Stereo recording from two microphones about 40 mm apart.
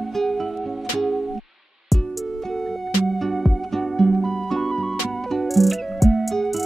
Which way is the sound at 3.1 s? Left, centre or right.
Centre.